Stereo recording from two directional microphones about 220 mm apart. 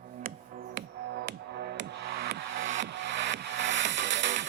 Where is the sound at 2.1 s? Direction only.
45° right (ahead or behind).